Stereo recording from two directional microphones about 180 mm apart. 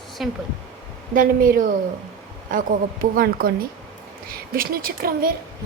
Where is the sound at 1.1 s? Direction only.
50° right (ahead or behind).